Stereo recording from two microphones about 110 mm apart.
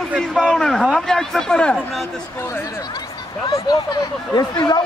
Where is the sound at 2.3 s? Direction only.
20° left (ahead or behind).